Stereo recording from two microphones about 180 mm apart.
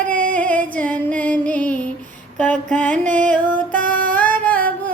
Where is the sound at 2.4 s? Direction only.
10° left (ahead or behind).